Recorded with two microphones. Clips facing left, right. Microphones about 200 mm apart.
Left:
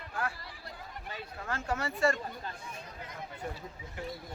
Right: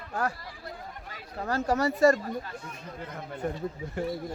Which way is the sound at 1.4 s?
40° right (ahead or behind).